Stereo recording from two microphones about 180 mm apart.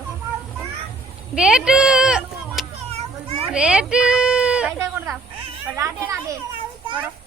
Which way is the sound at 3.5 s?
5° right (ahead or behind).